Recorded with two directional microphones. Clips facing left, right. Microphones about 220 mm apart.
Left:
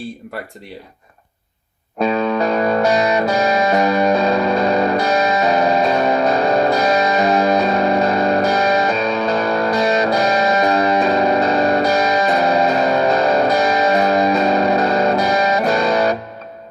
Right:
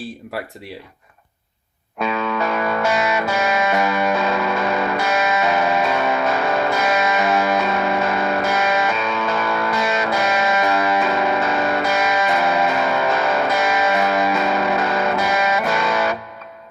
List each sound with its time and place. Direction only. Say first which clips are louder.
2.0 s music: left 5 dB; 35° left (ahead or behind)